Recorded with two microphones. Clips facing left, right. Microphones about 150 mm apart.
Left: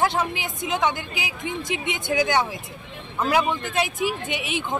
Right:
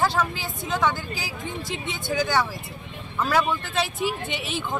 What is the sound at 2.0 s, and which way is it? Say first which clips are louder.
A woman's voice: left 2 dB; 20° left (ahead or behind).